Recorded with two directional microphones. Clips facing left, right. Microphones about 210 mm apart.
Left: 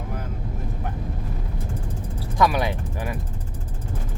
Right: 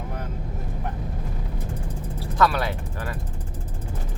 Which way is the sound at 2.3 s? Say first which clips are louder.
Left 1 dB; 15° left (ahead or behind).